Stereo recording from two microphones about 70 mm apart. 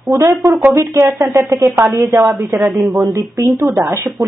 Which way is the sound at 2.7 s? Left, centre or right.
Centre.